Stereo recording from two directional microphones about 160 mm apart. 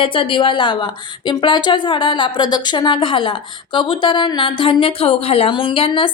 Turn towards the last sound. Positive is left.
turn(degrees=30)  # may be behind; listen again after turning